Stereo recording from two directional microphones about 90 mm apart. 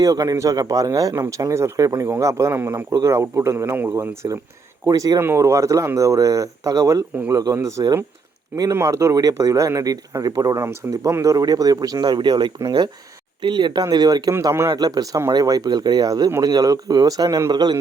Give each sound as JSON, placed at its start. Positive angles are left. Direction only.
{"t": 0.0, "sound": "speech", "side_deg": -45}
{"t": 1.1, "sound": "speech", "side_deg": -30}
{"t": 5.2, "sound": "speech", "side_deg": -30}
{"t": 13.4, "sound": "speech", "side_deg": -60}
{"t": 17.5, "sound": "speech", "side_deg": -50}